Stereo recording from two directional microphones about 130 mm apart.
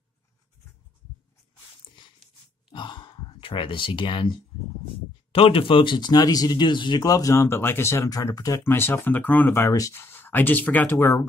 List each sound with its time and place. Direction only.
2.7 s sigh: 40° left (ahead or behind)
4.8 s speech: 45° left (ahead or behind); by 11.2 s 20° left (ahead or behind)